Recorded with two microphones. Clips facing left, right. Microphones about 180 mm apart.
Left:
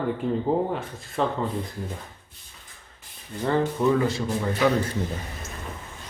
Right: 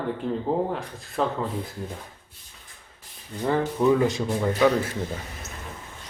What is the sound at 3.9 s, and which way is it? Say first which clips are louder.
Speech: right 3 dB; 15° right (ahead or behind).